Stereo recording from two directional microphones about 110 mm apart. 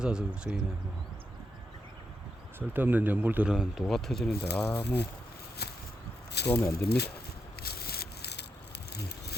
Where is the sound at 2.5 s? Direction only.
20° right (ahead or behind); by 4.2 s 5° left (ahead or behind).